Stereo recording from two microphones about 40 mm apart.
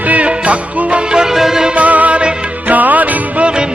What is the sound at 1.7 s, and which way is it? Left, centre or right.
Music, right.